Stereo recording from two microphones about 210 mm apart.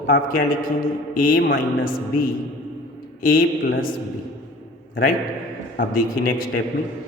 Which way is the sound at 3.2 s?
45° left (ahead or behind).